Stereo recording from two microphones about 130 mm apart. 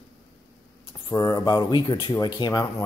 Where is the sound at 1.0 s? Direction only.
25° left (ahead or behind).